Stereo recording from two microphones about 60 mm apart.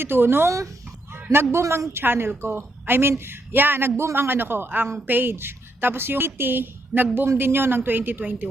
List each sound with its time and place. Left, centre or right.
0.0 s a woman's voice: right